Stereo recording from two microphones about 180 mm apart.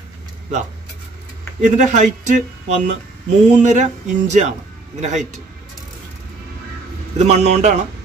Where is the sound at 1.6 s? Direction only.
40° right (ahead or behind).